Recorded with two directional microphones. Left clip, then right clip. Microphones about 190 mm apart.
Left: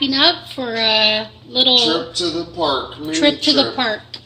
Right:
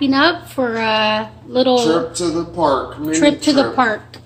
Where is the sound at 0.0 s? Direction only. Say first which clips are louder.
Even; 5° right (ahead or behind).